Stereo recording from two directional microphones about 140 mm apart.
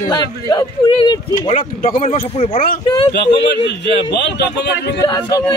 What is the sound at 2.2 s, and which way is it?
Speech, 45° left (ahead or behind).